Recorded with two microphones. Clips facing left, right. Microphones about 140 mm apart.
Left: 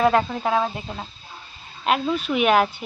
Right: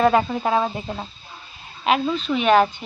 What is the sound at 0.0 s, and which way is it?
Speech, 5° right (ahead or behind).